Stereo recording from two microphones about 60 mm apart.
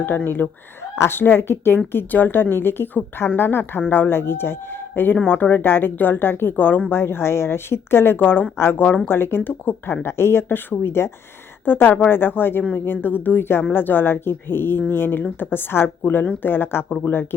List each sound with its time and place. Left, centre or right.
0.4 s speech: left
0.8 s a woman's voice: left